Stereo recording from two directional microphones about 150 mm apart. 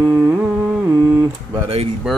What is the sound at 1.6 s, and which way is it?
Speech, 45° right (ahead or behind).